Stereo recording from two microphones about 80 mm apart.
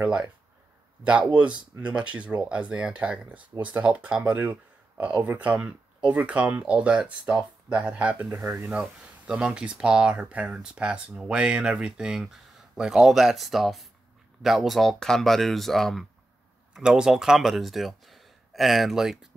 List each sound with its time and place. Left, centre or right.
1.0 s speech: centre
16.7 s speech: centre